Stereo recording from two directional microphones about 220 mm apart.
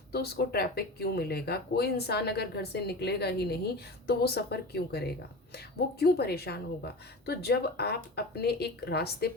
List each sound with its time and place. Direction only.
0.1 s speech: 45° left (ahead or behind)